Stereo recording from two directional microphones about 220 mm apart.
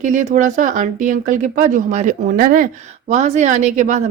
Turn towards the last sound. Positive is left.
turn(degrees=-35)  # may be behind; listen again after turning